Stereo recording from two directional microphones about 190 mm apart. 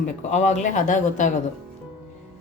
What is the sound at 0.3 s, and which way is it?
A woman's voice, 35° left (ahead or behind).